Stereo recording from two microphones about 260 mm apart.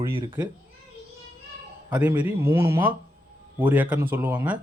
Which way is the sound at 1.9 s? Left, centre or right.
Centre.